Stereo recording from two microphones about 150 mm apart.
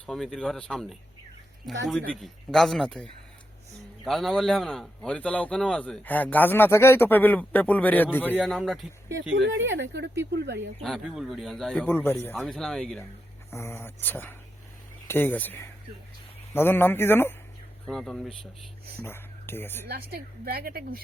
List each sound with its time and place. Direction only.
0.0 s a man's voice: centre (ahead or behind)
8.5 s speech: centre (ahead or behind)
9.9 s a woman's voice: 90° right
10.8 s speech: centre (ahead or behind)
13.5 s a man's voice: 15° left (ahead or behind)
17.8 s speech: 5° left (ahead or behind)
19.0 s speech: 15° left (ahead or behind)
19.9 s a woman's voice: 90° right